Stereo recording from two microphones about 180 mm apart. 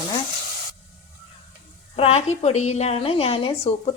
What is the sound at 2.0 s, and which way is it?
A woman's voice, 35° left (ahead or behind).